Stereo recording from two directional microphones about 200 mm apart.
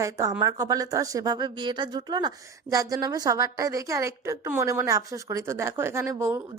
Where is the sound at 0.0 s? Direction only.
15° right (ahead or behind).